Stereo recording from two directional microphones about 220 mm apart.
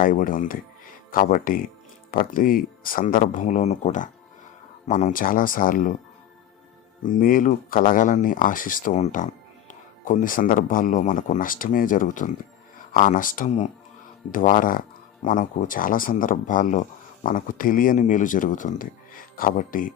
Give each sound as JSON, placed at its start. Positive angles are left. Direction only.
{"t": 0.0, "sound": "speech", "side_deg": 40}
{"t": 7.0, "sound": "speech", "side_deg": 40}